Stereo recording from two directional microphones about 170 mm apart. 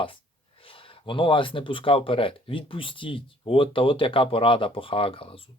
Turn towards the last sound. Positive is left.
turn(degrees=30)  # may be behind; listen again after turning